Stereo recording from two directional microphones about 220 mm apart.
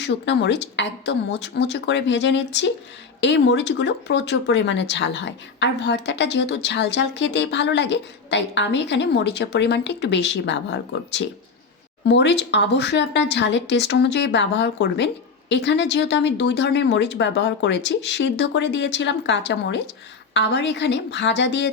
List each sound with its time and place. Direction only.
0.0 s speech: 55° left (ahead or behind)